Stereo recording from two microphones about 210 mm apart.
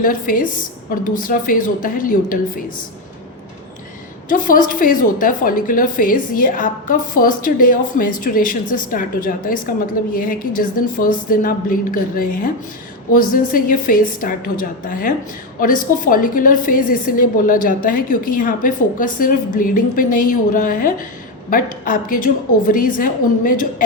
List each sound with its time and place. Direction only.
0.0 s a woman's voice: 40° left (ahead or behind)
4.3 s a woman's voice: 40° left (ahead or behind)